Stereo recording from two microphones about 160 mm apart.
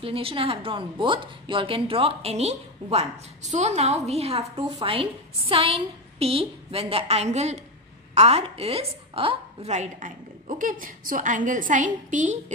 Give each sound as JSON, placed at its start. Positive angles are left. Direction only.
{"t": 0.0, "sound": "a woman's voice", "side_deg": -35}